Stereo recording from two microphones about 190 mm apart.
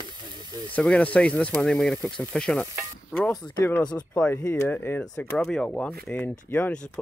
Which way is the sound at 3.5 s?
10° left (ahead or behind).